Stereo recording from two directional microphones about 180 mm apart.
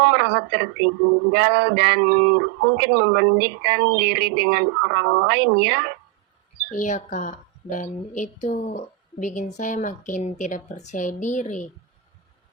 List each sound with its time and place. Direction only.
0.0 s a sound: 70° right (ahead or behind)
1.3 s speech: 70° right (ahead or behind)
6.7 s a woman's voice: 45° left (ahead or behind)